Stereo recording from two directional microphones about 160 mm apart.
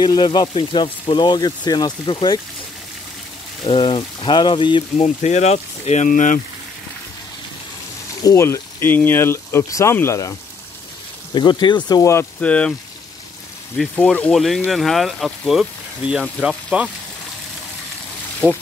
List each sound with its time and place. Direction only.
0.0 s speech: 30° left (ahead or behind)
3.6 s speech: 35° left (ahead or behind); by 6.4 s 55° left (ahead or behind)
8.2 s speech: 20° left (ahead or behind)
11.3 s speech: 30° left (ahead or behind); by 12.7 s 5° left (ahead or behind)
13.7 s speech: 10° left (ahead or behind)
18.4 s speech: 10° right (ahead or behind)